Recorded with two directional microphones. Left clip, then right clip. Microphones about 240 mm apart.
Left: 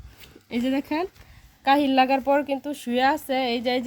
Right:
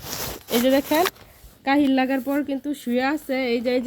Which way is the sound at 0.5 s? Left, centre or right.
Left.